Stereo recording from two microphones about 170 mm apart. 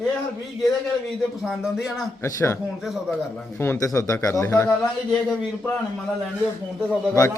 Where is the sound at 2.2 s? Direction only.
15° left (ahead or behind).